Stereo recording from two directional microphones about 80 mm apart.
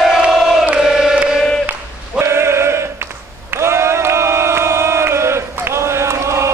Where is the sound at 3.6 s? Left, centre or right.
Right.